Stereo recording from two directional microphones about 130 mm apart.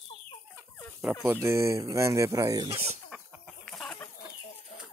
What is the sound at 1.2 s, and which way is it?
Speech, 20° right (ahead or behind).